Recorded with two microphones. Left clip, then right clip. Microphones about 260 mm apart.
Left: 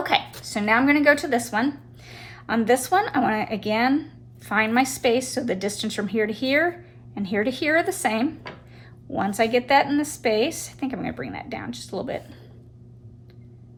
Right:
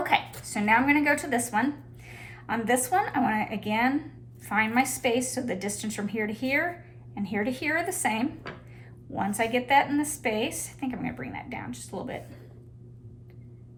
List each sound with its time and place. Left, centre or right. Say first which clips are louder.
0.1 s a woman's voice: left 3 dB; centre